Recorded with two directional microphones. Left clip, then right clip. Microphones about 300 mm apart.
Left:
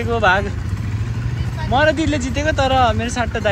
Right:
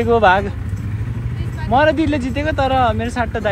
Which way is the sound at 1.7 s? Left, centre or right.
Centre.